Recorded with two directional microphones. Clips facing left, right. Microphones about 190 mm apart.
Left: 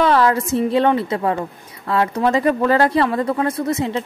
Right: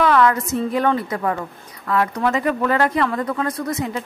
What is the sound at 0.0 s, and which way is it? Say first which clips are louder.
A woman's voice: left 1 dB; 30° left (ahead or behind).